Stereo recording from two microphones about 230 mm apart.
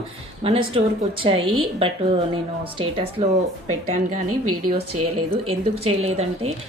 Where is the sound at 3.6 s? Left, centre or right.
Right.